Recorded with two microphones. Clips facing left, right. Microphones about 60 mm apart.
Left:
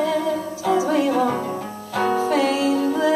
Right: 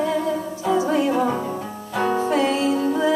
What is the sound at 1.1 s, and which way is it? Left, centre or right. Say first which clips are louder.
Music: left 1 dB; right.